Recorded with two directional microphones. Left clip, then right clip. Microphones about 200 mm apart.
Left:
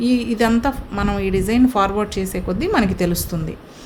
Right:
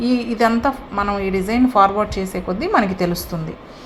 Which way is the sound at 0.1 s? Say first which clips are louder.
Even; 50° left (ahead or behind).